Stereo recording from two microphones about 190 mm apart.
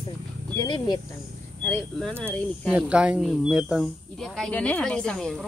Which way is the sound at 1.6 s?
5° left (ahead or behind).